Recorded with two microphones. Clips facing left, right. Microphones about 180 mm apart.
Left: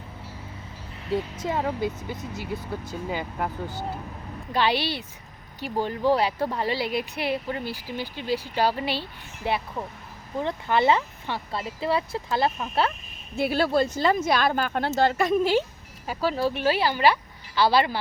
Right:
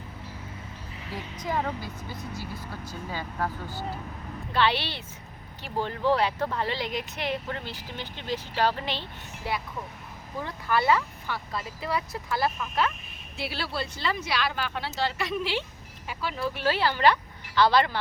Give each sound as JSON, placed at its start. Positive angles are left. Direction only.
{"t": 1.5, "sound": "speech", "side_deg": 25}
{"t": 9.5, "sound": "speech", "side_deg": 20}
{"t": 13.3, "sound": "speech", "side_deg": 50}
{"t": 16.5, "sound": "speech", "side_deg": 15}